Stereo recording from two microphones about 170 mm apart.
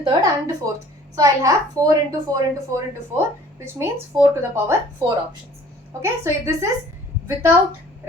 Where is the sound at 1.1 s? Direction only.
20° right (ahead or behind).